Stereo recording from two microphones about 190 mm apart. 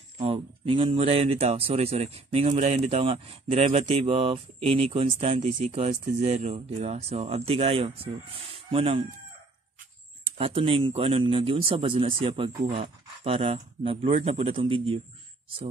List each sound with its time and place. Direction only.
0.2 s speech: 30° right (ahead or behind)
10.2 s speech: 30° right (ahead or behind)